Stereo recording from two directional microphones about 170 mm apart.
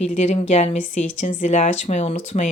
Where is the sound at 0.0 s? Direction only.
40° left (ahead or behind).